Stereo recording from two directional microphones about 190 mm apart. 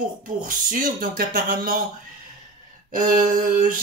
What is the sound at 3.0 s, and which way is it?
Speech, 45° right (ahead or behind).